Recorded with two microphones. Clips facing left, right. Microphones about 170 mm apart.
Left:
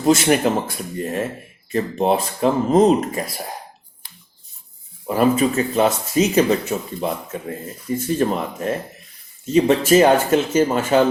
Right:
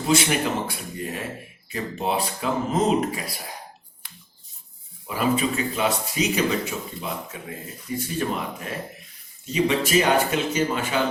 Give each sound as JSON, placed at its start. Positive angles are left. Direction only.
{"t": 0.0, "sound": "speech", "side_deg": 45}
{"t": 5.0, "sound": "speech", "side_deg": 45}